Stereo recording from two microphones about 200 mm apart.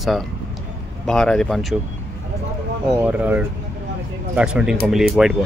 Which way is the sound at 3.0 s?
10° right (ahead or behind).